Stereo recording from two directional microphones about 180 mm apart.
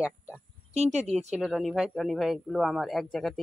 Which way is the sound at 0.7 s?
35° right (ahead or behind).